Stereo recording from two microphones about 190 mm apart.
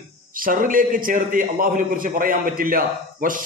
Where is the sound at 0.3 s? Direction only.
45° right (ahead or behind).